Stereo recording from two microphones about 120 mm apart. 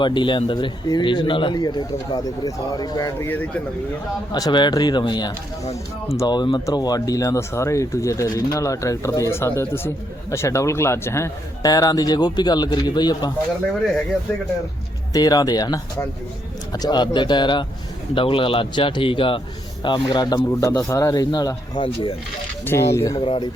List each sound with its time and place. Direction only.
0.0 s speech: 40° left (ahead or behind)
3.2 s speech: 15° left (ahead or behind)
4.3 s speech: 35° left (ahead or behind)
15.1 s speech: 30° left (ahead or behind)
20.5 s speech: 25° left (ahead or behind)
22.6 s speech: 20° left (ahead or behind)
23.1 s speech: 45° left (ahead or behind)